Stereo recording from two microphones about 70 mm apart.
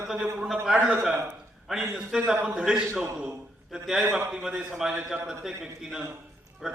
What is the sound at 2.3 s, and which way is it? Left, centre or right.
A man's voice, right.